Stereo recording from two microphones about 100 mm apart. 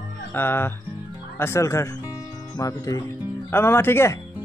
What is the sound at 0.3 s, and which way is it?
Speech, 20° left (ahead or behind).